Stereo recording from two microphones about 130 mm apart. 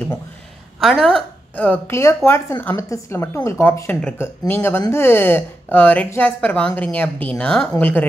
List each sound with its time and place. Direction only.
0.7 s a woman's voice: centre (ahead or behind)
1.5 s a woman's voice: 10° left (ahead or behind)